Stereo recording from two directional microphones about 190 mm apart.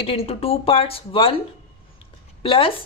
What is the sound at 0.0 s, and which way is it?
A woman's voice, 30° left (ahead or behind).